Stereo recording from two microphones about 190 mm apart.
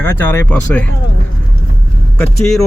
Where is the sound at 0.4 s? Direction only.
5° left (ahead or behind).